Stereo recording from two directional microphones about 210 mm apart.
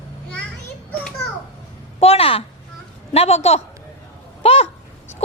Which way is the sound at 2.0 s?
30° left (ahead or behind).